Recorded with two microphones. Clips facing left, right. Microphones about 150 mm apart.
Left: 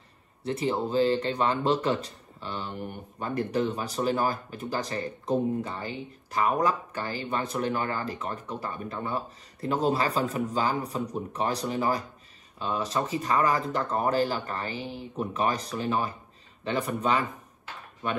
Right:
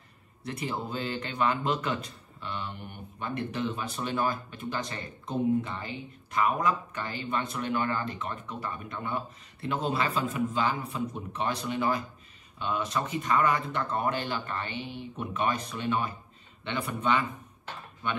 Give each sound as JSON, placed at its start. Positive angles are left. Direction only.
{"t": 0.4, "sound": "speech", "side_deg": 30}